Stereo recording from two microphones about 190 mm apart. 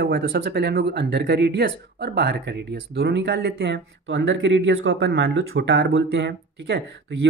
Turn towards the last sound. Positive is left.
turn(degrees=-65)  # may be behind; listen again after turning